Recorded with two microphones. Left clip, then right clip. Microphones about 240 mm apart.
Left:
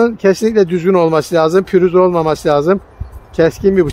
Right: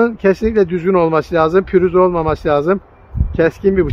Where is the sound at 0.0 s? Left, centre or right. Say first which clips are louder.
Left 2 dB; left.